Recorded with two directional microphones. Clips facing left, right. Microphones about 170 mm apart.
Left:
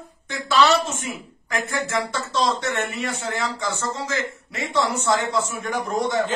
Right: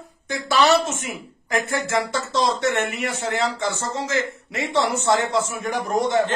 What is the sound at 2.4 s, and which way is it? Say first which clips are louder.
A man's voice: right 2 dB; 20° right (ahead or behind).